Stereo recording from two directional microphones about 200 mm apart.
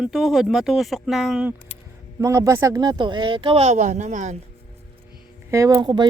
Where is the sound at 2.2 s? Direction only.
15° right (ahead or behind); by 4.3 s 35° right (ahead or behind).